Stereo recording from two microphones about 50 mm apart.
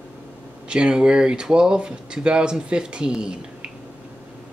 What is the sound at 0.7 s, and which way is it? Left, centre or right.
Speech, centre.